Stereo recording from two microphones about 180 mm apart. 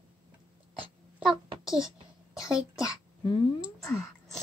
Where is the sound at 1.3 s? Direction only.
5° right (ahead or behind).